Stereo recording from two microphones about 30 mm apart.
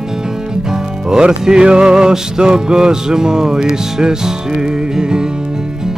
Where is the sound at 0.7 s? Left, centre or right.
Right.